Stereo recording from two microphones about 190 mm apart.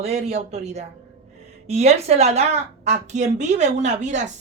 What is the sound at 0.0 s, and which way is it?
A woman's voice, 35° right (ahead or behind).